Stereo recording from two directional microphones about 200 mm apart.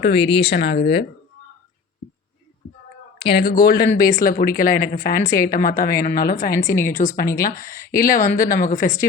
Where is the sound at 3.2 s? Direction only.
50° left (ahead or behind).